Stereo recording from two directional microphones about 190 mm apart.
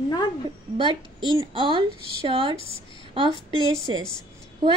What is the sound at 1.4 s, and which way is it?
Speech, 25° right (ahead or behind).